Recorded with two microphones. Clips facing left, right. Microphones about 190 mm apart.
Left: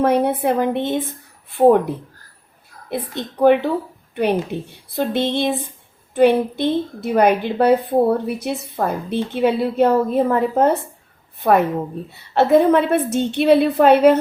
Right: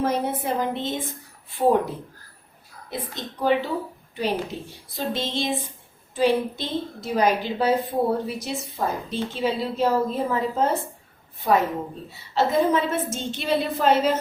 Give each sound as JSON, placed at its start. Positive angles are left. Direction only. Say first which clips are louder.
{"t": 0.0, "sound": "a woman's voice", "louder": "left 8 dB", "side_deg": 65}
{"t": 2.9, "sound": "a woman's voice", "louder": "left 7 dB", "side_deg": 60}